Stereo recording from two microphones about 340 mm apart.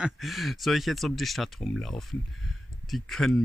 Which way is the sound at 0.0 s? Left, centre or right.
Centre.